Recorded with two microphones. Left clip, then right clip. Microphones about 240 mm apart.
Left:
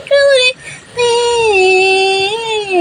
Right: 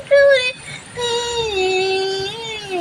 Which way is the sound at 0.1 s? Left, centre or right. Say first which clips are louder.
Left 3 dB; centre.